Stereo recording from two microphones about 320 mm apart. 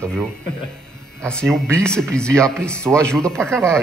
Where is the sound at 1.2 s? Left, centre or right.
Centre.